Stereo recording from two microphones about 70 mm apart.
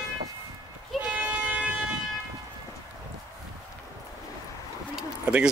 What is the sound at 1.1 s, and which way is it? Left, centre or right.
Vehicle, centre.